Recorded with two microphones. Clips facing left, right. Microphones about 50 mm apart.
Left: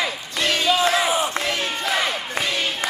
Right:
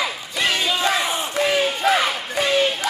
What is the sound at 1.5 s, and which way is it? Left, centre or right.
Crowd, centre.